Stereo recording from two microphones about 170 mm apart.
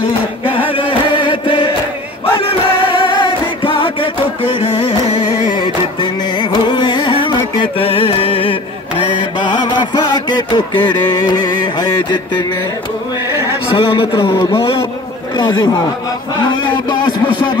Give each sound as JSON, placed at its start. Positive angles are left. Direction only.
{"t": 0.5, "sound": "music", "side_deg": 30}
{"t": 13.7, "sound": "a man's voice", "side_deg": 30}
{"t": 17.3, "sound": "a sound", "side_deg": 30}